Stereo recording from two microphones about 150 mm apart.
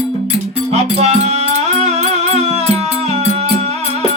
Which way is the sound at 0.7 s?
45° right (ahead or behind).